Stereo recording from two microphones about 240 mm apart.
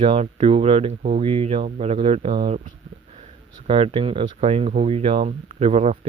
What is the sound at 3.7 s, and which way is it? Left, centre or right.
Speech, right.